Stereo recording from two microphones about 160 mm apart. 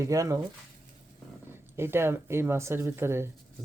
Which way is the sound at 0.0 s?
20° right (ahead or behind).